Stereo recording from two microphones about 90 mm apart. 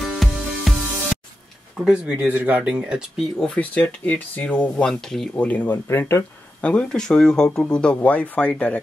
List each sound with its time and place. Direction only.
0.0 s music: centre (ahead or behind)
1.9 s speech: 15° right (ahead or behind)
3.3 s speech: 10° left (ahead or behind)
5.3 s speech: 20° left (ahead or behind)
6.6 s speech: 10° left (ahead or behind)